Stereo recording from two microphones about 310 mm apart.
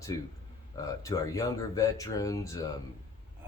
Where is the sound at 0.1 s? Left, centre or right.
Centre.